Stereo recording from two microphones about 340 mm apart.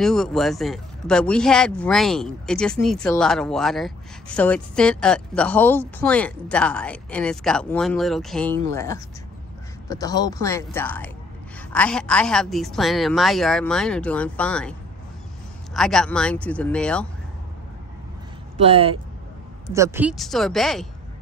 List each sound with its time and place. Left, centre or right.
0.0 s speech: centre
18.6 s speech: centre